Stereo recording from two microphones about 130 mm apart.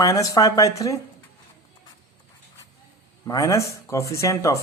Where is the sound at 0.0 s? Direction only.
25° left (ahead or behind).